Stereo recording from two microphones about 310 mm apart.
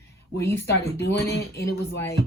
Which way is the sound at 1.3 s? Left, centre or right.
Left.